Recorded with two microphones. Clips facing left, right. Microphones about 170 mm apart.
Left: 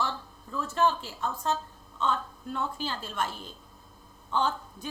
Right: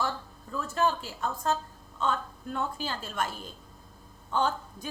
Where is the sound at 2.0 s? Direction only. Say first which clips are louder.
Even; 45° right (ahead or behind).